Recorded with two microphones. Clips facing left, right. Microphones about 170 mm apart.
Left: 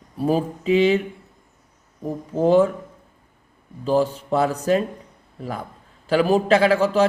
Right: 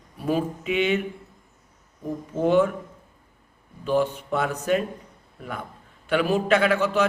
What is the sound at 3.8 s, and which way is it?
A man's voice, 35° left (ahead or behind).